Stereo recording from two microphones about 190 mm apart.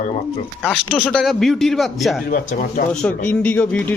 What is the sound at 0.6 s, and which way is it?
Speech, 5° right (ahead or behind).